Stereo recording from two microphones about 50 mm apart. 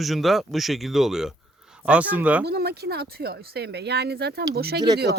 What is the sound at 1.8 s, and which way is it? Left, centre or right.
Speech, right.